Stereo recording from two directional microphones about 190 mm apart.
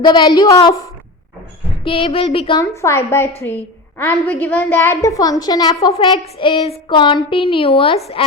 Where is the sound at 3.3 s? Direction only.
35° left (ahead or behind).